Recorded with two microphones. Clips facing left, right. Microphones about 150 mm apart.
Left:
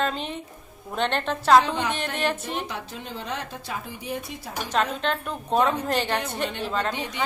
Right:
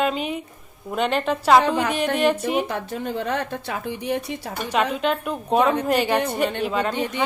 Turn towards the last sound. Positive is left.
turn(degrees=-10)  # may be behind; listen again after turning